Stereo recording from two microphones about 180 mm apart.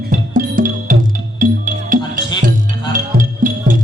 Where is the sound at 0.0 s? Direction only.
50° right (ahead or behind).